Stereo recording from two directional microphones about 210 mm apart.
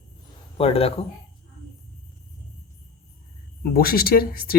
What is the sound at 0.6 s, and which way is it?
Speech, 30° left (ahead or behind).